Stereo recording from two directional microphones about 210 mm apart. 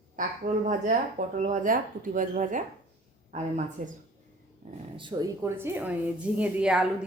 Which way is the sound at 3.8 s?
35° right (ahead or behind).